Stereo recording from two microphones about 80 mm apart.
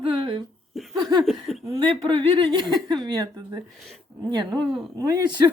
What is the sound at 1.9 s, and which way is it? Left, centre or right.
Speech, right.